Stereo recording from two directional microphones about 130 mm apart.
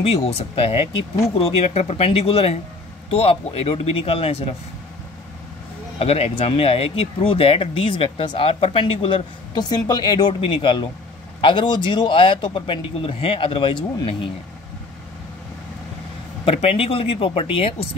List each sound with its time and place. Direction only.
0.0 s speech: 50° left (ahead or behind)
5.9 s speech: 50° left (ahead or behind)
16.4 s speech: 50° left (ahead or behind)